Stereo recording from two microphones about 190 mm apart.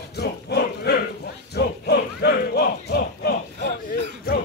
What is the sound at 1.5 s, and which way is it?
Battle cry, 55° left (ahead or behind).